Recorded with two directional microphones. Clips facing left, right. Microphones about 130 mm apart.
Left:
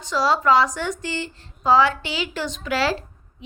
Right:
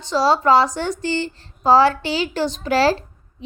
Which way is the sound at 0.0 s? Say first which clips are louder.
Right 3 dB; 30° right (ahead or behind).